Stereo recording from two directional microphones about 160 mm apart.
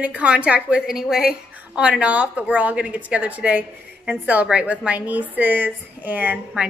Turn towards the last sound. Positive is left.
turn(degrees=-10)  # may be behind; listen again after turning